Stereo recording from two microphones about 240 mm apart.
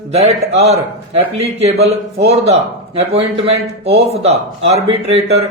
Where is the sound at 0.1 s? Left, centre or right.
Right.